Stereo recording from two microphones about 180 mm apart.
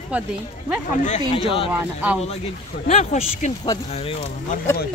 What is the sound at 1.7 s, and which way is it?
Speech, 10° right (ahead or behind).